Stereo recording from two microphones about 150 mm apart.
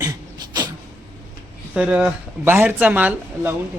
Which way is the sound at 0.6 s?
30° right (ahead or behind).